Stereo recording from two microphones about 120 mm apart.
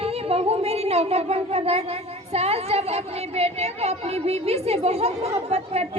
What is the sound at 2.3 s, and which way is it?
A woman's voice, 60° right (ahead or behind).